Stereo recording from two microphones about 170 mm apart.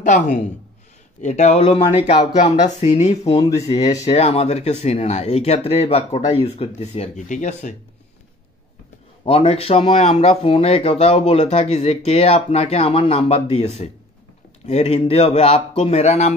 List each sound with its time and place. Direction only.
0.0 s speech: 45° left (ahead or behind)
9.2 s speech: 35° left (ahead or behind)